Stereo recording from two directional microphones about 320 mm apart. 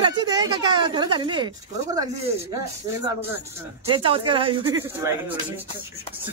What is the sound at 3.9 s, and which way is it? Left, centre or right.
Speech, centre.